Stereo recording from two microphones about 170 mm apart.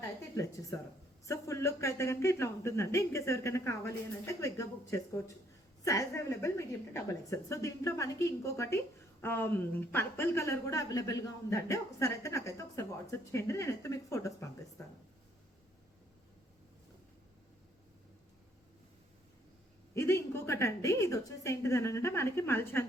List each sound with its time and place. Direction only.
0.0 s a sound: 20° left (ahead or behind)
1.2 s speech: 20° left (ahead or behind)
19.9 s speech: 15° left (ahead or behind)